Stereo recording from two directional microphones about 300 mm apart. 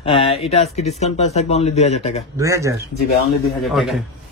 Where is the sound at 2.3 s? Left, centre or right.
Centre.